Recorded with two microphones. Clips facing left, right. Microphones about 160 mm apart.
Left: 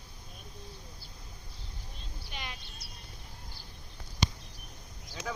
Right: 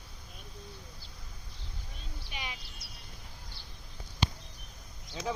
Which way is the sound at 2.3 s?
10° right (ahead or behind).